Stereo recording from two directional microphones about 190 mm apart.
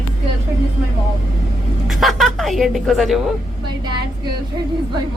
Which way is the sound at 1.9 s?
Centre (ahead or behind).